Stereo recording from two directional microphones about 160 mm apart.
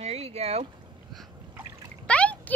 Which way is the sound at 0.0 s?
40° right (ahead or behind).